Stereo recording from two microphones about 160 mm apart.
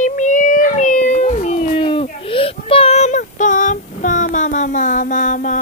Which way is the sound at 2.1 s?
35° left (ahead or behind).